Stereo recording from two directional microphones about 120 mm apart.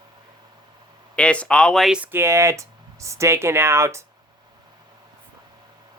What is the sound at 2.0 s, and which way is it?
Speech, 20° right (ahead or behind).